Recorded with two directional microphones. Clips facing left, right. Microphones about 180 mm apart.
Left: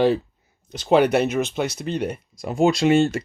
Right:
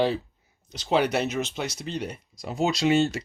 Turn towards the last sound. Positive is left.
turn(degrees=50)  # may be behind; listen again after turning